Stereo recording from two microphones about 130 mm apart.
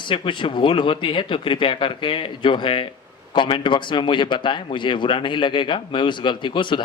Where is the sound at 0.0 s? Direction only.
40° left (ahead or behind).